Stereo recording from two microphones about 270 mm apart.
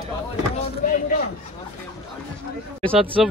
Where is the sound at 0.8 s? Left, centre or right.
Left.